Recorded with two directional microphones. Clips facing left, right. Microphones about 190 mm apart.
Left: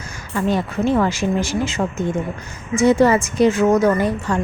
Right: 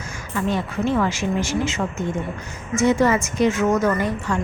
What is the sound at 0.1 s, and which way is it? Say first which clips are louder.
A woman's voice: left 3 dB; 35° left (ahead or behind).